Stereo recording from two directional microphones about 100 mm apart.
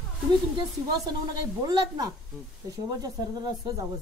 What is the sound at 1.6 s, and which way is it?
Speech, 45° right (ahead or behind).